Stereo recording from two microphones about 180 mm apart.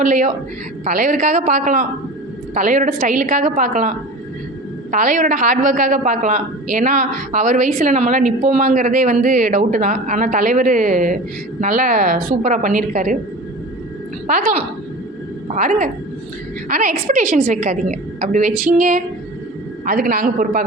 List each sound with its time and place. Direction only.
0.0 s a woman's voice: 45° right (ahead or behind)
14.3 s a woman's voice: 45° right (ahead or behind)